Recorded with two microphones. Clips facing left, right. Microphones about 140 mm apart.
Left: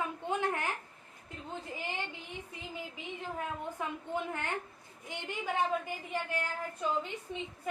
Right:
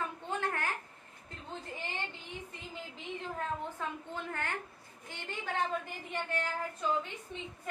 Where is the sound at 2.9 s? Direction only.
15° left (ahead or behind).